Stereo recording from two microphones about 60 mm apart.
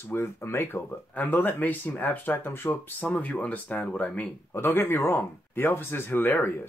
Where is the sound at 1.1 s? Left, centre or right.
Left.